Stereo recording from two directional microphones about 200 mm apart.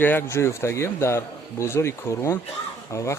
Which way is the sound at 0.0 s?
10° left (ahead or behind).